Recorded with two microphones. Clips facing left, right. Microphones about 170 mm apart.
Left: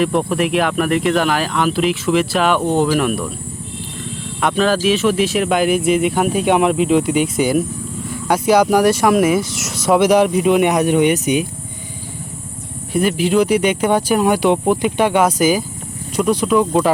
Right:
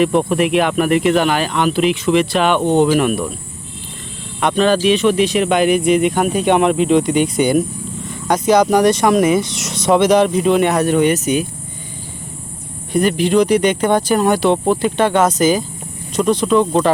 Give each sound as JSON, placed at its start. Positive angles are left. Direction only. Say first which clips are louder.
{"t": 0.0, "sound": "speech", "louder": "right 2 dB", "side_deg": 0}
{"t": 4.4, "sound": "speech", "louder": "right 2 dB", "side_deg": 0}
{"t": 12.9, "sound": "speech", "louder": "right 1 dB", "side_deg": 5}